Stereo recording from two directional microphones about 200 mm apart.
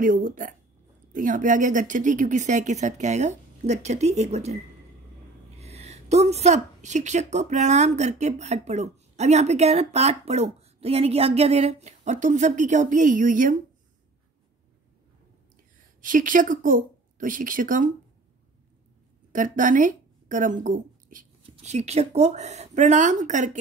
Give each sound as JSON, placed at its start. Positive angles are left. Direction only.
{"t": 0.0, "sound": "a woman's voice", "side_deg": -40}
{"t": 5.6, "sound": "a woman's voice", "side_deg": -30}
{"t": 16.0, "sound": "a woman's voice", "side_deg": -40}
{"t": 19.3, "sound": "a woman's voice", "side_deg": -40}